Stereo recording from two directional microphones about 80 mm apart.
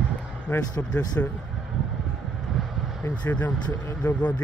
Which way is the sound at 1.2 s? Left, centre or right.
Centre.